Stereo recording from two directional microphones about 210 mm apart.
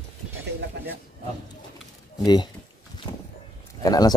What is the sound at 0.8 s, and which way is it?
Speech, 50° right (ahead or behind).